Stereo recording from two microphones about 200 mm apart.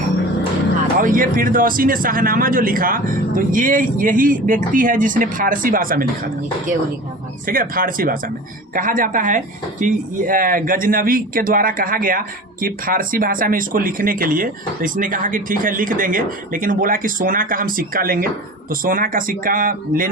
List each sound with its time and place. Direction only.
0.9 s speech: 45° right (ahead or behind)
7.4 s speech: 45° right (ahead or behind)